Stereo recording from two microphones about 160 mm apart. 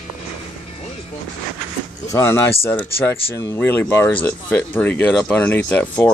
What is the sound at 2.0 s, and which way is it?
Speech, 20° left (ahead or behind).